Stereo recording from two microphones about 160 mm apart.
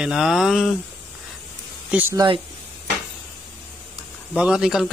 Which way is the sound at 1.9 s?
10° right (ahead or behind).